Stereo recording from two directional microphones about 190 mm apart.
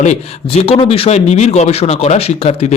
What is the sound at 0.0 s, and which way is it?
A man's voice, 35° left (ahead or behind).